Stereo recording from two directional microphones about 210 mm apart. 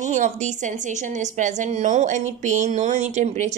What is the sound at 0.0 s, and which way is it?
A woman's voice, 35° right (ahead or behind).